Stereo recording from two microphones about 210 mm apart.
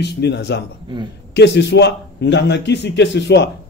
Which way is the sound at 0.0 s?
55° left (ahead or behind).